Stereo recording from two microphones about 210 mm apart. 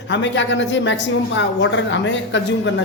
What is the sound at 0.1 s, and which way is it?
A woman's voice, 60° left (ahead or behind).